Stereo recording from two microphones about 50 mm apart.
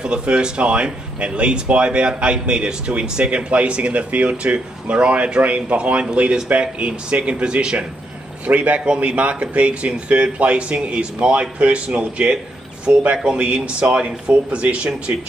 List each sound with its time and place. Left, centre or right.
0.0 s speech: centre